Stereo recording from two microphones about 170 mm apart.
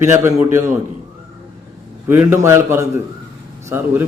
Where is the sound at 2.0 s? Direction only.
15° right (ahead or behind).